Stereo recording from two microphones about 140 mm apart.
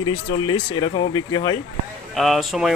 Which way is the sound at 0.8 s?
35° left (ahead or behind).